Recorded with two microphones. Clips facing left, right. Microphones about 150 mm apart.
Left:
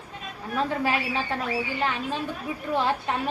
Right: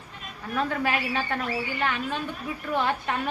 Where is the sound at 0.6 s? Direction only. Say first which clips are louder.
Left 1 dB; 30° left (ahead or behind).